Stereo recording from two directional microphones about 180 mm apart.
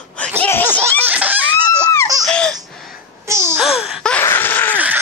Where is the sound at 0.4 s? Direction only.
10° left (ahead or behind).